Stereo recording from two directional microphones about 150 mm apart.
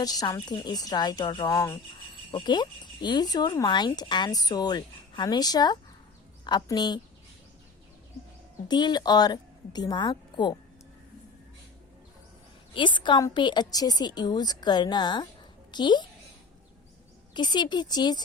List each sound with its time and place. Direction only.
0.0 s a woman's voice: 25° left (ahead or behind)
8.6 s speech: 30° left (ahead or behind)
12.7 s speech: 30° left (ahead or behind)
17.3 s speech: 30° left (ahead or behind)